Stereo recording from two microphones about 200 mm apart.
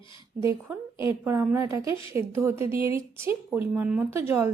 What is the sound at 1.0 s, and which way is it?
A woman's voice, 10° right (ahead or behind).